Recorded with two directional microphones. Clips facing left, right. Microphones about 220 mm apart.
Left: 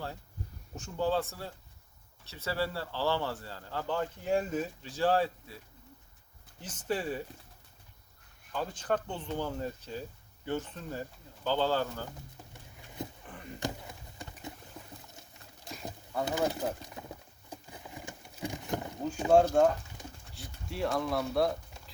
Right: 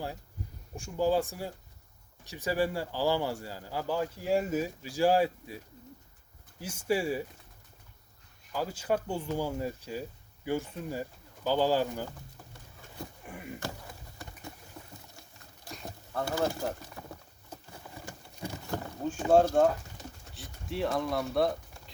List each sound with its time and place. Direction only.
0.8 s speech: 10° right (ahead or behind)
8.5 s speech: 10° right (ahead or behind)
13.2 s a sound: 10° right (ahead or behind)
14.8 s patter: 5° left (ahead or behind)
15.9 s bird: 15° left (ahead or behind)
18.4 s rowboat: 15° left (ahead or behind)
19.3 s speech: 5° right (ahead or behind)